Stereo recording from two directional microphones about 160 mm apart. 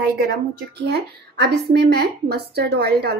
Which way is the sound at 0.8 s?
85° right.